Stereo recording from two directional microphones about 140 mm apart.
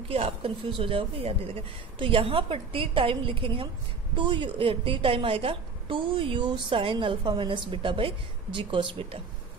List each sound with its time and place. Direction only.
0.1 s a woman's voice: 40° right (ahead or behind)